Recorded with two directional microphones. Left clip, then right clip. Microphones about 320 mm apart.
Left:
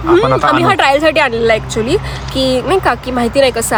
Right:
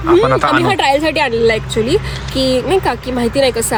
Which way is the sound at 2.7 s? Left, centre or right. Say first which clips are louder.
Left 2 dB; centre.